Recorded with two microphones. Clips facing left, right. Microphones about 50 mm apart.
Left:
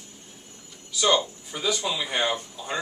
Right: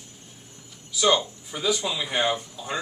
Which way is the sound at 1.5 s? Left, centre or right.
Centre.